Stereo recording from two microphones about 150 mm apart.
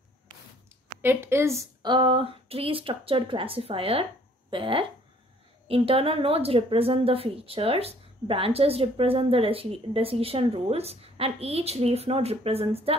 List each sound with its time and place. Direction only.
1.0 s a woman's voice: 15° right (ahead or behind)
1.8 s speech: 30° right (ahead or behind)